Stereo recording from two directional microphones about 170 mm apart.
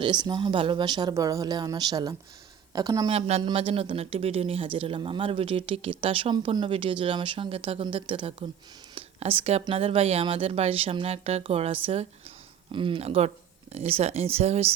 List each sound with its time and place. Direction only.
0.0 s speech: 25° right (ahead or behind)
3.1 s speech: 35° right (ahead or behind)